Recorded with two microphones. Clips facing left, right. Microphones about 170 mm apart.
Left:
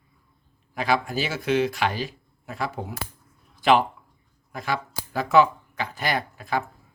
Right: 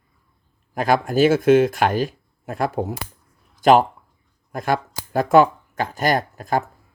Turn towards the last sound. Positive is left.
turn(degrees=-45)  # may be behind; listen again after turning